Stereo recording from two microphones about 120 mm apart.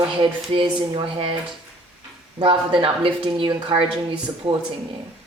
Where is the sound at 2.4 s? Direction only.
45° right (ahead or behind).